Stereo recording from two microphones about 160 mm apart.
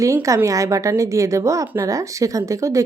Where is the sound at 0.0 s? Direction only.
20° right (ahead or behind).